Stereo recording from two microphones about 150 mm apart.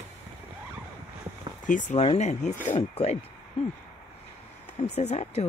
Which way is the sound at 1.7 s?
55° left (ahead or behind).